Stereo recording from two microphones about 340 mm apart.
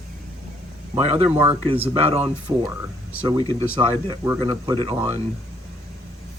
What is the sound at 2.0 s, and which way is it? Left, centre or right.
Speech, centre.